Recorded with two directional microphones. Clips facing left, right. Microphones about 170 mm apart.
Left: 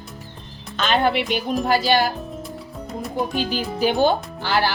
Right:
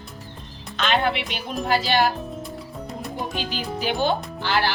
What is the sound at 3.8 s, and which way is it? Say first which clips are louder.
Speech: left 5 dB; 45° left (ahead or behind).